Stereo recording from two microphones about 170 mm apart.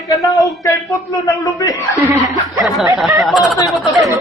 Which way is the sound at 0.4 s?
20° left (ahead or behind).